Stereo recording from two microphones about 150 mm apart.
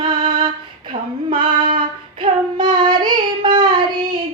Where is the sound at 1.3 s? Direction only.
35° right (ahead or behind).